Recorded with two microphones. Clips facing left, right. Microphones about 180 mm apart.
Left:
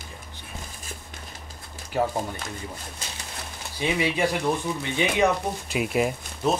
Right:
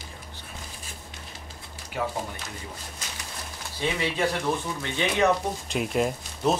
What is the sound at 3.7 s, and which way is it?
Speech, 15° left (ahead or behind).